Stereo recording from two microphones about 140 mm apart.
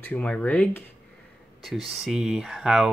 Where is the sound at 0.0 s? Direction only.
10° left (ahead or behind).